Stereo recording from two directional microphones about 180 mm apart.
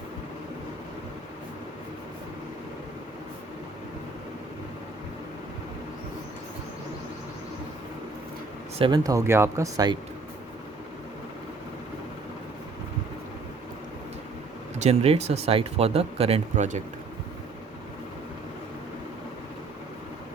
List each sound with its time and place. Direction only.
8.8 s speech: 20° right (ahead or behind)
14.8 s speech: 35° right (ahead or behind)